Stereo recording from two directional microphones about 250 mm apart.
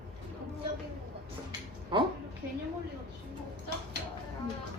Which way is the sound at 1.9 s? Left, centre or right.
Centre.